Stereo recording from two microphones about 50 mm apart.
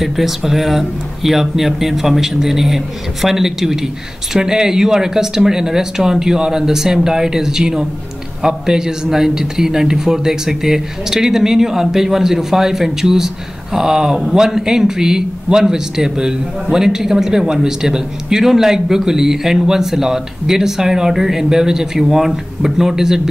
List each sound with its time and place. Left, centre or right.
0.0 s speech: centre